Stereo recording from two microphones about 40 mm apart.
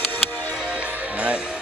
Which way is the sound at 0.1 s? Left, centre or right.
Left.